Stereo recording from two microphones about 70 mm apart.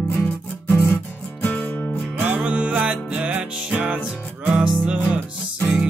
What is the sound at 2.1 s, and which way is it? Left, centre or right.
Music, centre.